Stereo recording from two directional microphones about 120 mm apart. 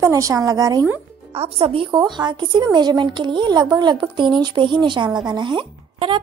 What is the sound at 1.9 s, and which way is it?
Speech, 35° right (ahead or behind).